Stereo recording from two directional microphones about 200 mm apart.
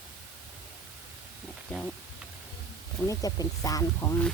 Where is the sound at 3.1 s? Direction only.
20° left (ahead or behind).